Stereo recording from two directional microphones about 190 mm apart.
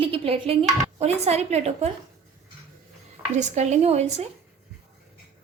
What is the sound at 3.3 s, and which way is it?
Speech, 40° right (ahead or behind).